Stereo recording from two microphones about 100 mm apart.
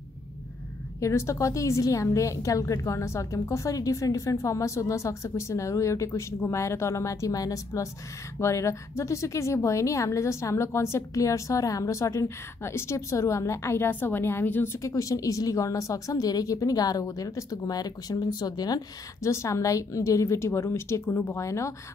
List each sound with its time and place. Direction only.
1.0 s a woman's voice: 30° left (ahead or behind)
19.2 s a woman's voice: 30° left (ahead or behind)